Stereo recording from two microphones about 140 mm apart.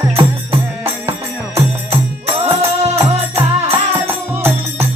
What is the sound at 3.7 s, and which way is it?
Music, 15° right (ahead or behind).